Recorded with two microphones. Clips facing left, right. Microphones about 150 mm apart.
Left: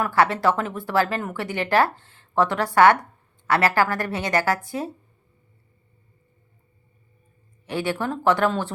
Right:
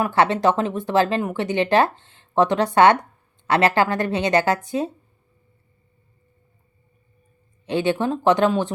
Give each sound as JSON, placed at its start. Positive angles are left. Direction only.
{"t": 0.0, "sound": "speech", "side_deg": -20}
{"t": 7.6, "sound": "speech", "side_deg": -20}